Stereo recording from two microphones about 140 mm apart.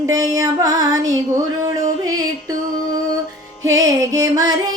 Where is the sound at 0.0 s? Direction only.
25° right (ahead or behind).